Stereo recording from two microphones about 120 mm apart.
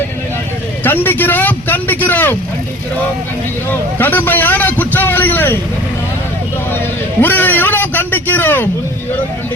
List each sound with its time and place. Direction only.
0.9 s a man's voice: 15° left (ahead or behind)
3.7 s a man's voice: 15° left (ahead or behind)
7.2 s a man's voice: 15° left (ahead or behind)